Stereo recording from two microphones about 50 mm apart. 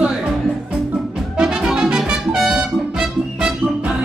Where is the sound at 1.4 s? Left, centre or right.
Centre.